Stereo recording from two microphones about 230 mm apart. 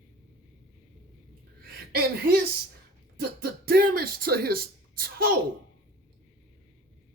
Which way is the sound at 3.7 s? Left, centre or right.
Right.